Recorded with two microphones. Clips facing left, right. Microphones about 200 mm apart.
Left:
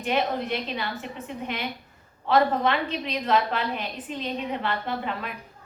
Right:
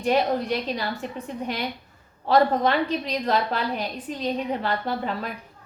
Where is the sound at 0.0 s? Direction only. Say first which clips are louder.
Right 4 dB; 40° right (ahead or behind).